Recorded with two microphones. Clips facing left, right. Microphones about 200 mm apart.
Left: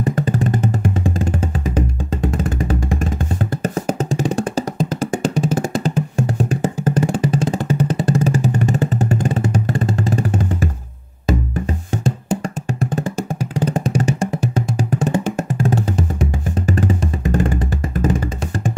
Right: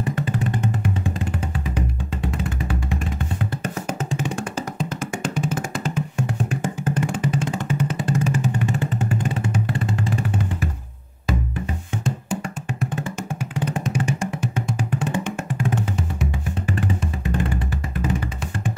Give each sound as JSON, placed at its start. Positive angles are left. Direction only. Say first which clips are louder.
{"t": 0.0, "sound": "music", "louder": "left 5 dB", "side_deg": 40}
{"t": 2.2, "sound": "music", "louder": "left 6 dB", "side_deg": 45}
{"t": 13.6, "sound": "music", "louder": "left 6 dB", "side_deg": 40}